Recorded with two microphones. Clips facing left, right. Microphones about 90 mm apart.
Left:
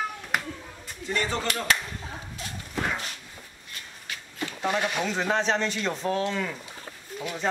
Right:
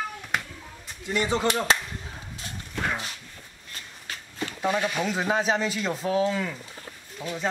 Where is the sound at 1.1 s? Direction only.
15° right (ahead or behind).